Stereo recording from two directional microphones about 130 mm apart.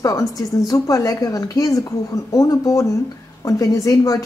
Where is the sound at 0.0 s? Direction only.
25° left (ahead or behind).